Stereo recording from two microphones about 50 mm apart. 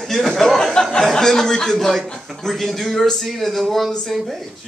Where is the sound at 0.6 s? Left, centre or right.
Centre.